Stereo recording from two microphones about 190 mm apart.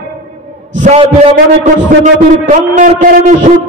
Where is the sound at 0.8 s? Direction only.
35° right (ahead or behind).